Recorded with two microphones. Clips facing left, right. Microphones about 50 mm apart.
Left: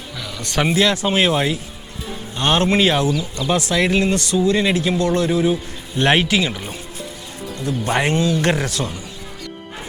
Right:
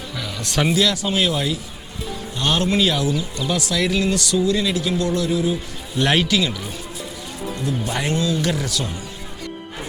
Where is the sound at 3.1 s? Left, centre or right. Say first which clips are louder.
Left 2 dB; right.